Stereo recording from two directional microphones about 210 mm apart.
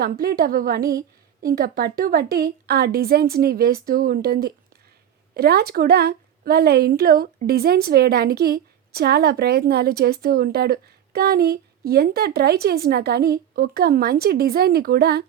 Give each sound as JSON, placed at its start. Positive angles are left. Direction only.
{"t": 0.0, "sound": "a woman's voice", "side_deg": -45}